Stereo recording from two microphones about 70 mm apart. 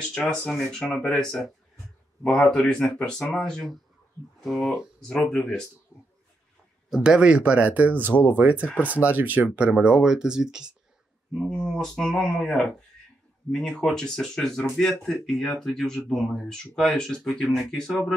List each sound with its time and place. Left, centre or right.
0.0 s speech: centre
7.0 s speech: centre
11.3 s speech: centre
17.3 s speech: centre